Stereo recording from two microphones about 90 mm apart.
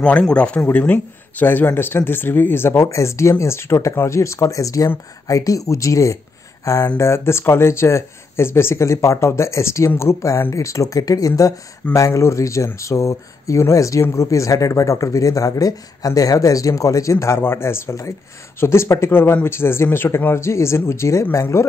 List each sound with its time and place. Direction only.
0.0 s a man's voice: 10° left (ahead or behind); by 21.6 s 35° left (ahead or behind)